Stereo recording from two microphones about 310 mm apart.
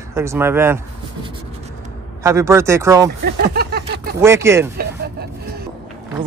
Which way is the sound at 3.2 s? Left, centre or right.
Right.